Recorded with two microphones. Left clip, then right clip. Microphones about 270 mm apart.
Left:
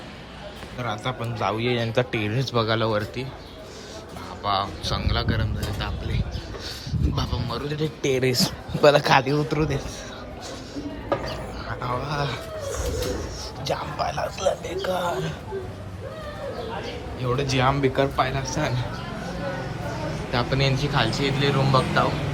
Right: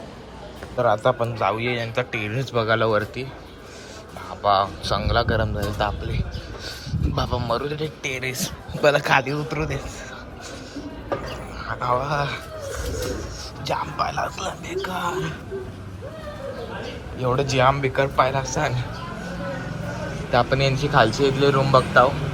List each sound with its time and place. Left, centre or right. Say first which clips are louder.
0.8 s speech: right 10 dB; centre
4.4 s speech: right 5 dB; centre
7.2 s speech: right 8 dB; centre
8.0 s speech: left 7 dB; left
8.8 s speech: left 1 dB; centre
11.6 s speech: right 7 dB; centre
13.7 s speech: right 2 dB; centre
17.2 s a man's voice: right 4 dB; centre
20.3 s speech: right 5 dB; centre